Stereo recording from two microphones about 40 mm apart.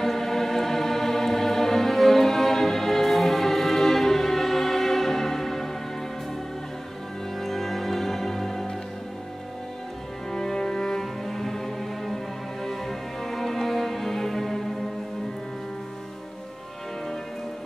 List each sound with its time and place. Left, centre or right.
0.0 s music: centre
7.3 s music: centre
10.3 s cello: centre
12.6 s music: centre